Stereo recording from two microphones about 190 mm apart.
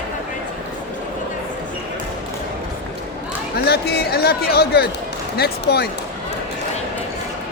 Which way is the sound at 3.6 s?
55° left (ahead or behind).